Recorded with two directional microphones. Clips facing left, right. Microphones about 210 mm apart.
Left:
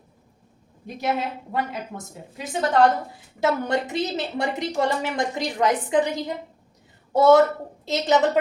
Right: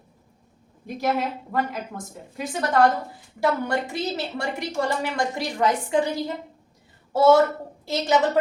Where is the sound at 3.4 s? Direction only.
20° left (ahead or behind).